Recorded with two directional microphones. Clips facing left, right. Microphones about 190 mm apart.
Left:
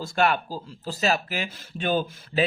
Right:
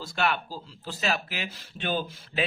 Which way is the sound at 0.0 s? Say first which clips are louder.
Left 5 dB; 45° left (ahead or behind).